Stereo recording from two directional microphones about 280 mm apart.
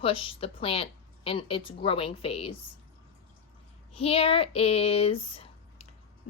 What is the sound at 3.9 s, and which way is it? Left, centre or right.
A woman's voice, left.